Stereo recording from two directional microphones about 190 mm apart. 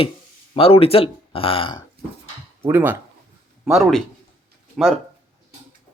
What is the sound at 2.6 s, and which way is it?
Speech, 10° right (ahead or behind).